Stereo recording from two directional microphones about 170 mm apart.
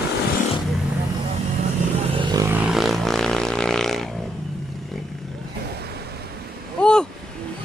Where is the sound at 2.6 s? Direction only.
Centre (ahead or behind).